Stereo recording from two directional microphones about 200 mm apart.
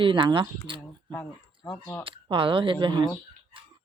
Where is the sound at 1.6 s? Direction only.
10° left (ahead or behind).